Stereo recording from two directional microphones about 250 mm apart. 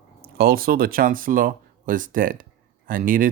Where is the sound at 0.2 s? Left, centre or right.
Right.